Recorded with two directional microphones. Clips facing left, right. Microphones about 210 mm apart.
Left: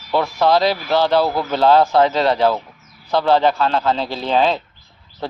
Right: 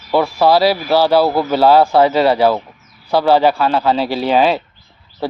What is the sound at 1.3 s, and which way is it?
Speech, 30° right (ahead or behind).